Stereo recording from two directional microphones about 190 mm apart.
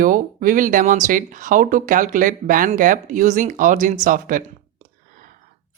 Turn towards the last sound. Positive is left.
turn(degrees=-45)  # may be behind; listen again after turning